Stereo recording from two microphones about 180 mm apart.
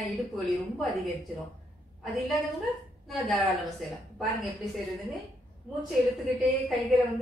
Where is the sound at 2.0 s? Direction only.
Centre (ahead or behind).